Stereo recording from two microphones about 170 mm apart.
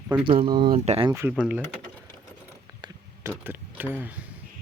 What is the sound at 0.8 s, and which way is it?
Speech, 40° right (ahead or behind).